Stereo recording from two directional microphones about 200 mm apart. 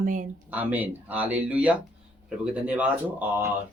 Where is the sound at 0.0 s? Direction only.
40° right (ahead or behind).